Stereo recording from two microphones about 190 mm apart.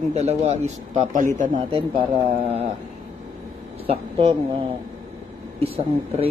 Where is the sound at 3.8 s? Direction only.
30° right (ahead or behind).